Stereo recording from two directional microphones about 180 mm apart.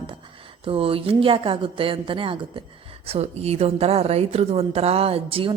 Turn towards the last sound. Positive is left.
turn(degrees=-30)  # may be behind; listen again after turning